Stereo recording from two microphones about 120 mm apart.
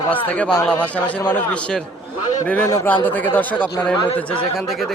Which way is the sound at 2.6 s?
25° left (ahead or behind).